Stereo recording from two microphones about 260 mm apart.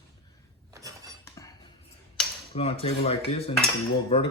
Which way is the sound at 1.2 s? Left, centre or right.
Centre.